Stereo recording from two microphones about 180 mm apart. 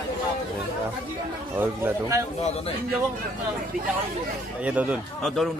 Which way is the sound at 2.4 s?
35° left (ahead or behind).